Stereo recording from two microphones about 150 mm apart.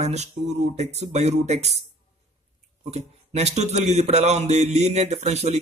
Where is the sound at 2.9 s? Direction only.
45° right (ahead or behind).